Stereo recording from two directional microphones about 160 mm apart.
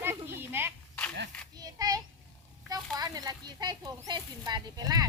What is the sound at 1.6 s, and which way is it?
Child singing, 25° right (ahead or behind).